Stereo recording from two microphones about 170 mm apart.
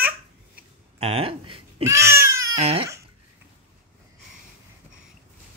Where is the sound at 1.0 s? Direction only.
35° right (ahead or behind).